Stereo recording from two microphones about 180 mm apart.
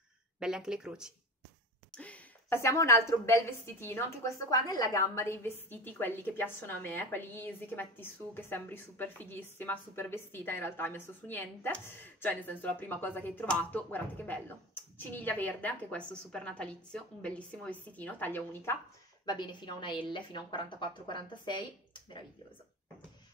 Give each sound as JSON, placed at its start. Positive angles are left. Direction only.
{"t": 0.4, "sound": "speech", "side_deg": -5}
{"t": 2.0, "sound": "a woman's voice", "side_deg": 10}
{"t": 19.2, "sound": "a woman's voice", "side_deg": 25}